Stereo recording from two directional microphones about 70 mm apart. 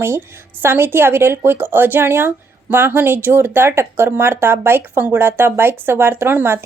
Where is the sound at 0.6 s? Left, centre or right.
Right.